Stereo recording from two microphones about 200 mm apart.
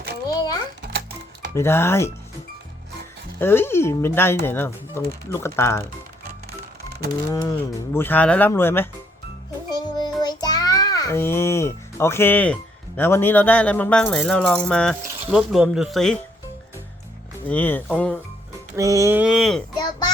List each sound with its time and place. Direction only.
0.3 s a sound: 20° left (ahead or behind)
1.5 s speech: 10° left (ahead or behind)
3.3 s speech: 10° left (ahead or behind)
7.3 s speech: 20° left (ahead or behind)
9.6 s music: 20° left (ahead or behind)
13.0 s speech: 10° left (ahead or behind)
17.5 s speech: 10° left (ahead or behind)
18.8 s speech: 15° right (ahead or behind); by 19.6 s centre (ahead or behind)
19.7 s a sound: 20° left (ahead or behind)